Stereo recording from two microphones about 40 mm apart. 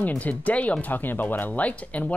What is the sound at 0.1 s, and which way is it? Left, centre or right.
Speech, left.